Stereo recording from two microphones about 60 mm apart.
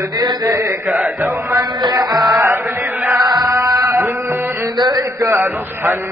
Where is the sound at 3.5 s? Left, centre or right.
Right.